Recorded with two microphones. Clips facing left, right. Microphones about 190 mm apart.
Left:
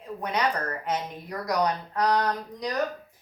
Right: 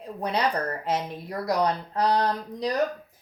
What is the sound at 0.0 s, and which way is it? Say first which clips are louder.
Speech: right 1 dB; 30° right (ahead or behind).